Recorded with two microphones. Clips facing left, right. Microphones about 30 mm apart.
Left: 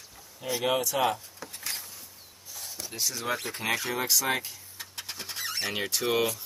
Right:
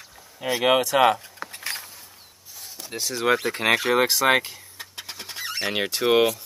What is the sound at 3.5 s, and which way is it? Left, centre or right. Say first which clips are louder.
Speech: right 9 dB; right.